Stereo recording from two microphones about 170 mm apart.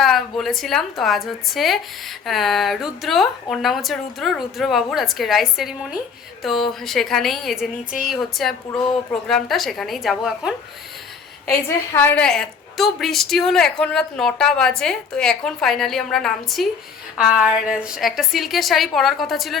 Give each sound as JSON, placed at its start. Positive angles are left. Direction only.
{"t": 0.0, "sound": "a woman's voice", "side_deg": 0}
{"t": 11.5, "sound": "a woman's voice", "side_deg": 10}